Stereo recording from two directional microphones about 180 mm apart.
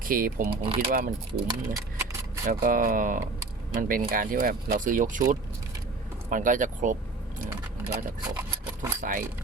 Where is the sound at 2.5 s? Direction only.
50° right (ahead or behind).